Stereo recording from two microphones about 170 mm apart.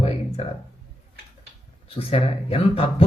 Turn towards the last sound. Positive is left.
turn(degrees=35)  # may be behind; listen again after turning